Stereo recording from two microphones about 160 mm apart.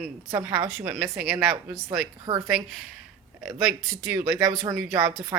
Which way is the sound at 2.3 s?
20° right (ahead or behind).